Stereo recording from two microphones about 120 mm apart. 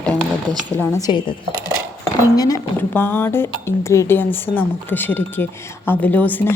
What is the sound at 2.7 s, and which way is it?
A woman's voice, 15° left (ahead or behind).